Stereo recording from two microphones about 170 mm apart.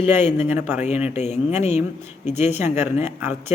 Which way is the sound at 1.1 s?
40° left (ahead or behind).